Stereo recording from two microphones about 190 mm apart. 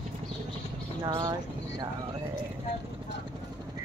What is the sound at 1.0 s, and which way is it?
Speech, 20° right (ahead or behind).